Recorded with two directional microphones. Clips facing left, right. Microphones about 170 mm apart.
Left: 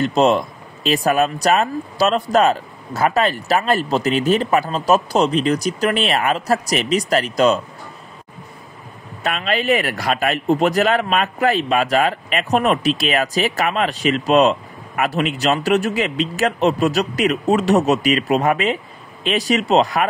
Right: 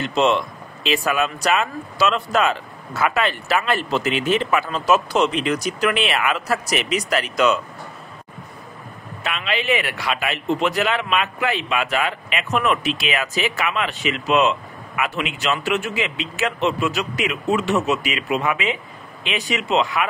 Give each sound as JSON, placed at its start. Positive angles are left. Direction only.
{"t": 0.0, "sound": "speech", "side_deg": 40}
{"t": 9.2, "sound": "speech", "side_deg": 40}